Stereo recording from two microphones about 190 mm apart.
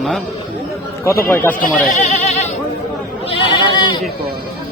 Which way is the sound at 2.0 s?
40° left (ahead or behind).